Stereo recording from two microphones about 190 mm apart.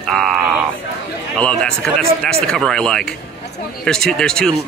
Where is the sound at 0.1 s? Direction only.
Centre (ahead or behind).